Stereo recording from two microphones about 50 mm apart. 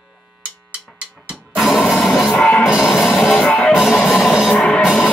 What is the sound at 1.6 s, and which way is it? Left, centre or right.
Printer, centre.